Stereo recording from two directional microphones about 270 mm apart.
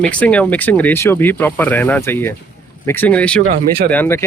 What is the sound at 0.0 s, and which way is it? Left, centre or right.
Speech, centre.